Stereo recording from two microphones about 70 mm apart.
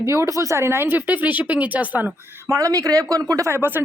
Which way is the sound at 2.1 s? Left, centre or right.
Right.